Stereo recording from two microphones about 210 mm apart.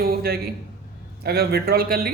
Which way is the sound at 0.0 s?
45° right (ahead or behind).